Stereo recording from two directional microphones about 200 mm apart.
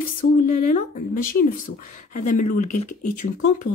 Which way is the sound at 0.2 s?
40° left (ahead or behind).